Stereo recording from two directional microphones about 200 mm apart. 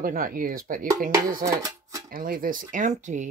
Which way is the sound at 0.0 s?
45° right (ahead or behind).